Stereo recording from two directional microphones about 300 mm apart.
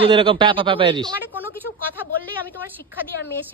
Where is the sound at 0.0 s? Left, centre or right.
Centre.